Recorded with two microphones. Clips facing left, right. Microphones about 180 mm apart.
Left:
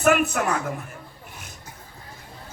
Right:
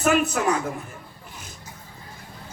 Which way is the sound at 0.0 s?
60° left (ahead or behind).